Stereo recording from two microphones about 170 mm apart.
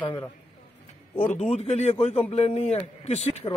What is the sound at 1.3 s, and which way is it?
Speech, 40° left (ahead or behind).